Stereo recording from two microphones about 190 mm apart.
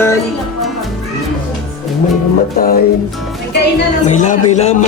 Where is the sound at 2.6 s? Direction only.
50° left (ahead or behind).